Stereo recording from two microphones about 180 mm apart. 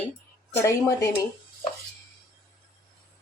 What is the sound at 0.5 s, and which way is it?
Speech, 15° left (ahead or behind).